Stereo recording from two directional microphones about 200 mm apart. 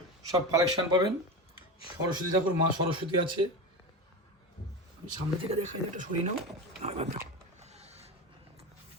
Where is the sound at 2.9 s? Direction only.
25° right (ahead or behind).